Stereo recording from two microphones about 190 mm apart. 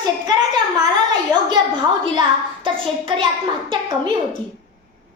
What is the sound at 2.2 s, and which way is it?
A child's voice, 25° right (ahead or behind).